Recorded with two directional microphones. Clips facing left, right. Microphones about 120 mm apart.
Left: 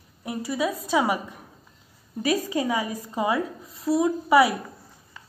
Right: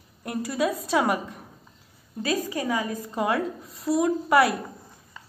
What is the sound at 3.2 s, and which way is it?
A woman's voice, centre (ahead or behind).